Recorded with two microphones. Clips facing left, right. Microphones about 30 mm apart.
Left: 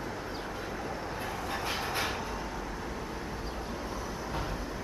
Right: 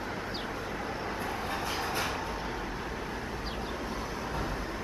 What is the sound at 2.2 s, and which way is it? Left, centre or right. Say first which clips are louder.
Vehicle: right 2 dB; right.